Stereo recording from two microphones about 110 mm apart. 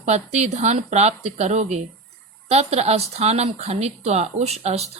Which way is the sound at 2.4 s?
75° right (ahead or behind).